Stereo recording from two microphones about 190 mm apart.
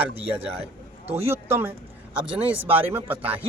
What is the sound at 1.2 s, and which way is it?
Speech, 10° right (ahead or behind).